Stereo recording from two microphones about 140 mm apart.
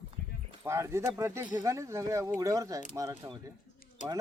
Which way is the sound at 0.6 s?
20° right (ahead or behind).